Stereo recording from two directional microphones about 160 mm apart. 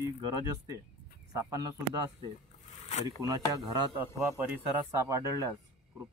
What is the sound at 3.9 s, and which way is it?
Speech, 10° right (ahead or behind).